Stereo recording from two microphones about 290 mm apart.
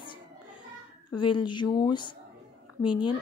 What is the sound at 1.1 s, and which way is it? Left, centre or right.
Speech, centre.